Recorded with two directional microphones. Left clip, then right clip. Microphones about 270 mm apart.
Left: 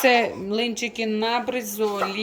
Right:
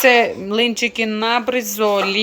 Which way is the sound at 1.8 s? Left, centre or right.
Right.